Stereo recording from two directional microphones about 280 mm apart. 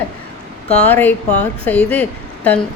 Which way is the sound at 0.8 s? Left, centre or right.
Centre.